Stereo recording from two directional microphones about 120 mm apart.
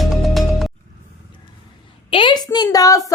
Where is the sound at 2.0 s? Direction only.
45° left (ahead or behind); by 3.0 s 30° left (ahead or behind).